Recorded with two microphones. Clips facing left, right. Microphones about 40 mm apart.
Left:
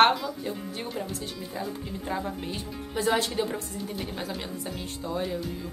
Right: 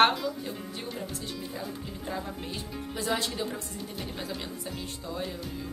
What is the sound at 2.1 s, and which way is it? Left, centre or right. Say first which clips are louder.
A woman's voice: left 4 dB; centre.